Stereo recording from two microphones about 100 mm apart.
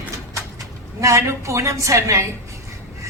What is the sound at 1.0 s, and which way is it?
A woman's voice, 30° right (ahead or behind).